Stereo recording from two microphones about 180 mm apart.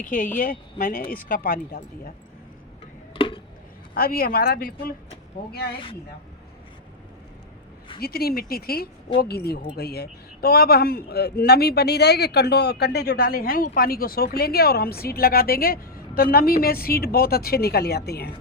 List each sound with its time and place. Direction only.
0.0 s speech: 50° left (ahead or behind)
3.2 s a sound: 30° left (ahead or behind)
3.9 s speech: 55° left (ahead or behind)
8.0 s speech: 60° left (ahead or behind)